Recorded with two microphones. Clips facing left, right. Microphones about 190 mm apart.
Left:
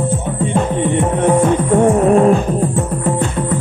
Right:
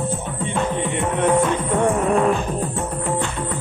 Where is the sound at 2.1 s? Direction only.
45° left (ahead or behind).